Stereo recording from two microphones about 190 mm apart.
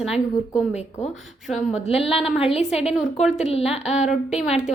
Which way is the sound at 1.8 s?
30° left (ahead or behind).